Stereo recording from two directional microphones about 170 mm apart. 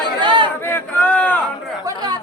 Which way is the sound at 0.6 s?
10° left (ahead or behind).